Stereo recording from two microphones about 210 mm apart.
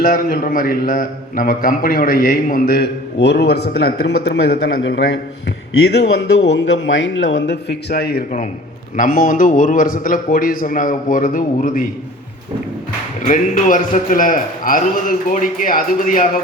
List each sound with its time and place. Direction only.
0.0 s a man's voice: 45° left (ahead or behind)
13.2 s a man's voice: 40° left (ahead or behind)